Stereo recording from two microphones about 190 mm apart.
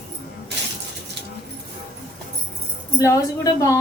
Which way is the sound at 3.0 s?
20° left (ahead or behind).